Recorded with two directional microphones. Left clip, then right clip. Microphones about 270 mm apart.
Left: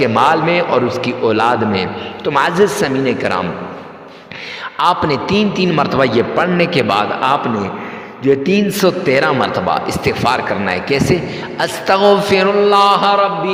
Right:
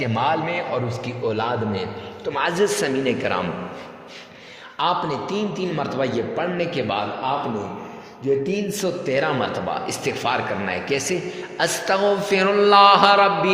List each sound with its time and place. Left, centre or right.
0.0 s a man's voice: left
4.8 s a man's voice: left
8.2 s a man's voice: left; by 13.5 s centre